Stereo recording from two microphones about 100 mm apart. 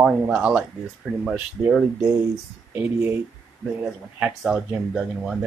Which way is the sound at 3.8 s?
15° right (ahead or behind).